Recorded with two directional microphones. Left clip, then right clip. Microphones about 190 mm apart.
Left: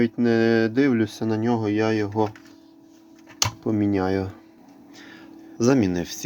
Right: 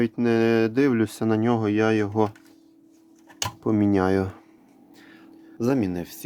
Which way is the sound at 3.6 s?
35° right (ahead or behind).